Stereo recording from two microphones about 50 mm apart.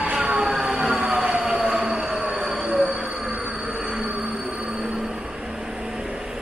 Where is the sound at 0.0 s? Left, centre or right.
Centre.